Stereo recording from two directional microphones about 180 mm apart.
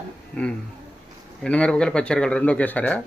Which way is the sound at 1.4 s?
5° left (ahead or behind).